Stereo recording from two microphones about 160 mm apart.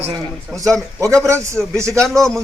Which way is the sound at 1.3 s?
15° right (ahead or behind).